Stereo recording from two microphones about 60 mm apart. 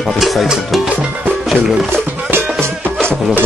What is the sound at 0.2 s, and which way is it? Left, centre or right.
Speech, centre.